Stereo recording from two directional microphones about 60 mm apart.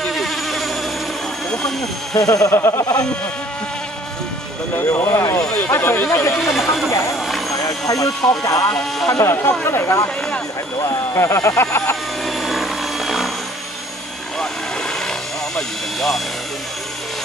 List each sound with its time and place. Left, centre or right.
0.0 s a sound: centre
2.1 s speech: left
2.5 s speech: left
2.8 s sheep: left
5.0 s speech: left
5.7 s speech: left
6.3 s speech: centre
7.2 s vehicle: centre
7.5 s speech: left
8.7 s speech: centre
9.2 s speech: left
11.1 s speech: left
12.3 s helicopter: centre
15.5 s speech: centre